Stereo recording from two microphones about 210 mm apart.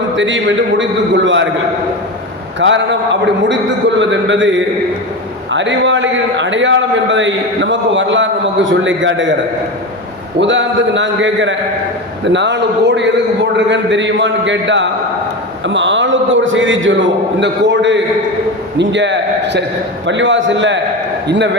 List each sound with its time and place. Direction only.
0.2 s a man's voice: 60° right (ahead or behind)
2.6 s a man's voice: 60° right (ahead or behind)
10.4 s a man's voice: 60° right (ahead or behind)